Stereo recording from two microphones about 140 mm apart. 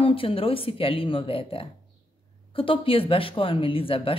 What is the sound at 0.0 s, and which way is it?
Speech, 40° left (ahead or behind).